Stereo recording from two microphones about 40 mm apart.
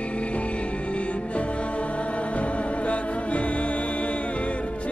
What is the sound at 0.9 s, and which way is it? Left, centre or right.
Music, left.